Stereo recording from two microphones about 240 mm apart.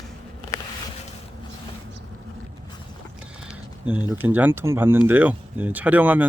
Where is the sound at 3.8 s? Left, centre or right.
Centre.